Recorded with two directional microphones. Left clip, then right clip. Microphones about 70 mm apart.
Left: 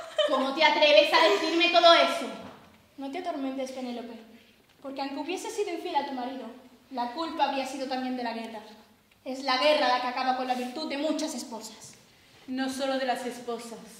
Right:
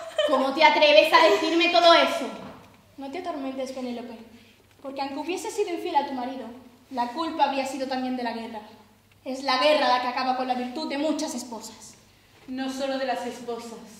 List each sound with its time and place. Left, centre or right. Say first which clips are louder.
0.1 s a woman's voice: right 3 dB; centre
3.0 s a woman's voice: right 1 dB; centre
12.5 s a woman's voice: right 1 dB; left